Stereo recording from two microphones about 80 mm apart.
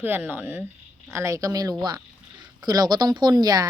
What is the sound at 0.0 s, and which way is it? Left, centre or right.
Speech, right.